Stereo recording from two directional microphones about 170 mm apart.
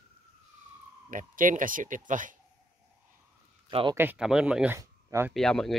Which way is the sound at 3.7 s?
30° right (ahead or behind).